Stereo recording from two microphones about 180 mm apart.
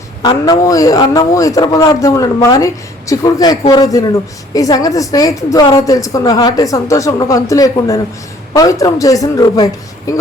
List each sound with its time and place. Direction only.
0.2 s a woman's voice: 20° left (ahead or behind)